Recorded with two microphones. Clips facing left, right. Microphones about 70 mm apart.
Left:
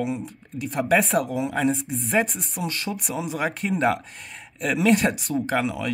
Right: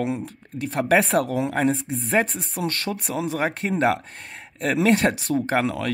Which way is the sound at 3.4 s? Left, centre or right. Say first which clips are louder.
Right 1 dB; right.